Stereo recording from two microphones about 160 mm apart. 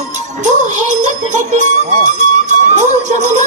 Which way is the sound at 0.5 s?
50° right (ahead or behind).